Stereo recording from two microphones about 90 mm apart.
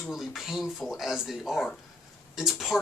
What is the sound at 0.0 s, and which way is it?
Speech, centre (ahead or behind).